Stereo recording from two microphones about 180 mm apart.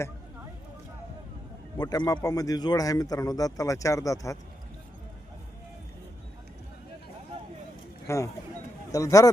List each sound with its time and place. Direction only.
1.8 s speech: 20° left (ahead or behind)
8.0 s speech: 15° left (ahead or behind)